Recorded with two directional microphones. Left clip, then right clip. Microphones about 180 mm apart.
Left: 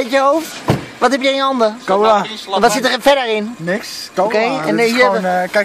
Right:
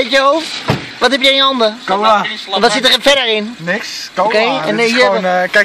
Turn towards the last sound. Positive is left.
turn(degrees=-20)  # may be behind; listen again after turning